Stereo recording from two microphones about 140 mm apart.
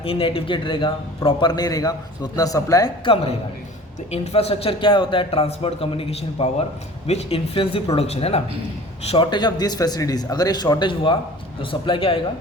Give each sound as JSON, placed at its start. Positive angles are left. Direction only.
{"t": 0.0, "sound": "a man's voice", "side_deg": 45}
{"t": 3.0, "sound": "a man's voice", "side_deg": 40}
{"t": 9.0, "sound": "a man's voice", "side_deg": 35}